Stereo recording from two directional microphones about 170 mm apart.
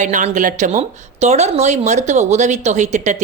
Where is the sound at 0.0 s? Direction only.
45° right (ahead or behind).